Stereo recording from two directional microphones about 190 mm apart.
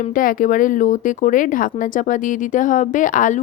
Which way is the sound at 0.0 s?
45° left (ahead or behind).